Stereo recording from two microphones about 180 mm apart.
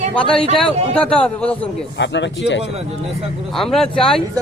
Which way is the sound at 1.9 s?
80° left.